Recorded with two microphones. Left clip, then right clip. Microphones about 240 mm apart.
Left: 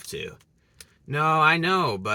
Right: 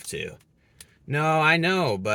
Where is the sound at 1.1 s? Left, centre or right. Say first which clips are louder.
Left 2 dB; left.